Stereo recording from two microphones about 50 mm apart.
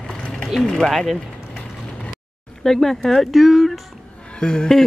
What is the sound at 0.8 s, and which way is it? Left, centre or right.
Speech, centre.